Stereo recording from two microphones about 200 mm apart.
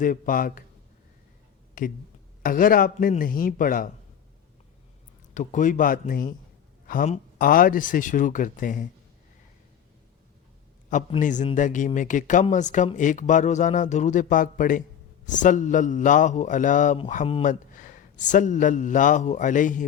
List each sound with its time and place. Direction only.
0.0 s speech: 45° left (ahead or behind)
1.8 s speech: 40° left (ahead or behind)
5.3 s speech: 40° left (ahead or behind)
11.2 s speech: 40° left (ahead or behind)